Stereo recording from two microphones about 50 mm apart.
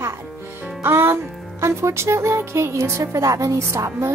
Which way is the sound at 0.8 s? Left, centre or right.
Right.